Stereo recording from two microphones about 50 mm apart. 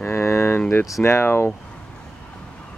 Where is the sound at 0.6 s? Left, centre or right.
Left.